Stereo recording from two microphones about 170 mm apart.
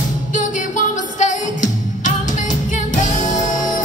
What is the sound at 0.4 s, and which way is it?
Music, 50° left (ahead or behind).